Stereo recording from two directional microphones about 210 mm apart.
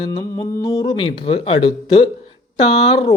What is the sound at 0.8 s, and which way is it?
Speech, 25° left (ahead or behind).